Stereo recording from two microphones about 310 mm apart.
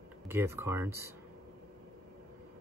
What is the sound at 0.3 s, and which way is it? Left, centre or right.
Speech, centre.